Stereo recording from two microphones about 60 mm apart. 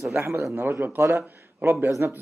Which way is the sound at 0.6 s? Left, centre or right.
Right.